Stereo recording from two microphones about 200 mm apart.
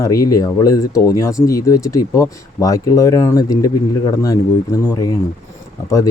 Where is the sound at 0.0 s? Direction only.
15° left (ahead or behind).